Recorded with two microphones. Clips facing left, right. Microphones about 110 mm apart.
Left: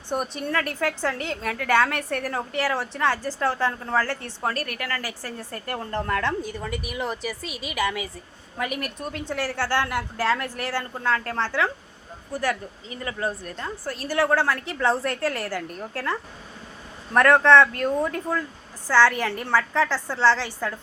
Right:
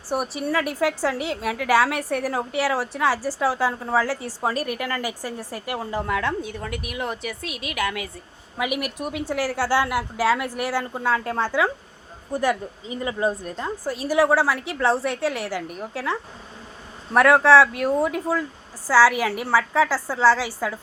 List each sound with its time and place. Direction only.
0.1 s a woman's voice: 5° right (ahead or behind)